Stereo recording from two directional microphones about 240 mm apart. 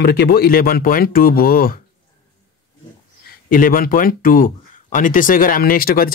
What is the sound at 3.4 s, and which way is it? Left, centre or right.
Speech, left.